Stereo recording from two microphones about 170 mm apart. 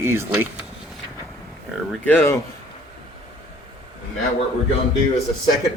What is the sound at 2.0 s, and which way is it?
Speech, 10° left (ahead or behind).